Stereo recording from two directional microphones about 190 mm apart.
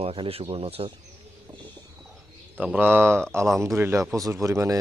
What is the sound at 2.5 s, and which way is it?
A man's voice, 10° right (ahead or behind).